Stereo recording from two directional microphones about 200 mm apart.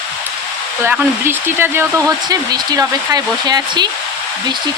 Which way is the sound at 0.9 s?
10° right (ahead or behind).